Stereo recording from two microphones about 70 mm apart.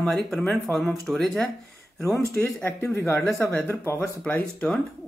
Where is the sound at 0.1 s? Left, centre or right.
Centre.